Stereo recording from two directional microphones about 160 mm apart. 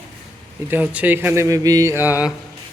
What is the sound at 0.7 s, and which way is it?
A man's voice, 10° right (ahead or behind).